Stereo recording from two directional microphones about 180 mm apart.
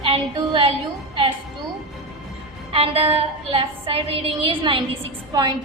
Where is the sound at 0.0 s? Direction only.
30° right (ahead or behind).